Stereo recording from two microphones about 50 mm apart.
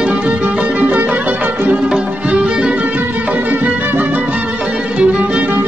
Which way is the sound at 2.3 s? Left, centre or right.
Centre.